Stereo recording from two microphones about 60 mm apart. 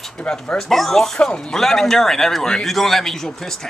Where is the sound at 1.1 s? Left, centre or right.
Centre.